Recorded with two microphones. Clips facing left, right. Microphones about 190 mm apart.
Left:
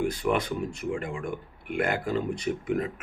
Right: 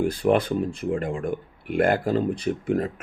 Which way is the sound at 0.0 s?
30° right (ahead or behind).